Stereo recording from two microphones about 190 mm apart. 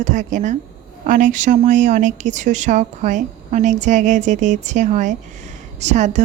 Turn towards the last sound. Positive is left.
turn(degrees=-40)  # may be behind; listen again after turning